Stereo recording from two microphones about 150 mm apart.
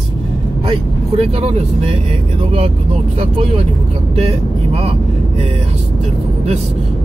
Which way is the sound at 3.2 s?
40° right (ahead or behind).